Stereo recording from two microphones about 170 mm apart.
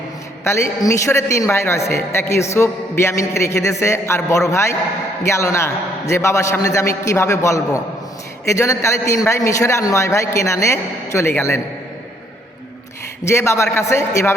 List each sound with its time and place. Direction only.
0.4 s a man's voice: 15° left (ahead or behind)
13.3 s a man's voice: 15° left (ahead or behind)